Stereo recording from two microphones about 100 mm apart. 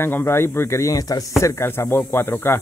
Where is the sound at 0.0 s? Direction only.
25° left (ahead or behind).